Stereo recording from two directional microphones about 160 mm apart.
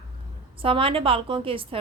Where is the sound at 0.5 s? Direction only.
35° right (ahead or behind).